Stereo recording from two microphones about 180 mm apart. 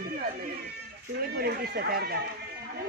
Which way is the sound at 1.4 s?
60° right (ahead or behind).